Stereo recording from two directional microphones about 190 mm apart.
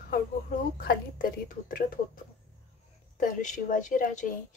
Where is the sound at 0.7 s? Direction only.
45° left (ahead or behind).